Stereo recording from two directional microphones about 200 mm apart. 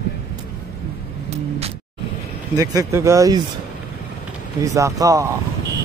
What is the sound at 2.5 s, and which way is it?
Speech, 15° right (ahead or behind).